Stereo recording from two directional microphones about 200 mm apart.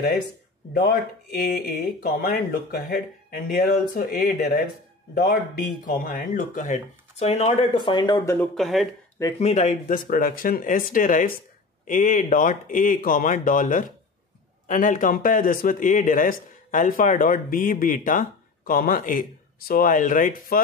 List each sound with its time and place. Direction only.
0.7 s speech: 50° left (ahead or behind); by 8.4 s 20° left (ahead or behind)
8.4 s speech: centre (ahead or behind)
9.4 s speech: 35° left (ahead or behind)